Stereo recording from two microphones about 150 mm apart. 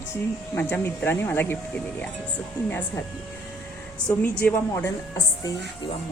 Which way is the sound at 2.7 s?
10° left (ahead or behind).